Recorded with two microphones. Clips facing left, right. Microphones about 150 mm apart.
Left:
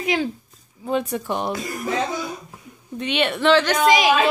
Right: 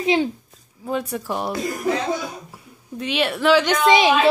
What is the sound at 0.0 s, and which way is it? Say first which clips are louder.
Speech: right 3 dB; 25° right (ahead or behind).